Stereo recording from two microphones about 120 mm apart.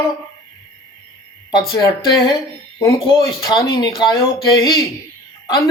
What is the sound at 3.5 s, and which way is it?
Speech, 35° left (ahead or behind).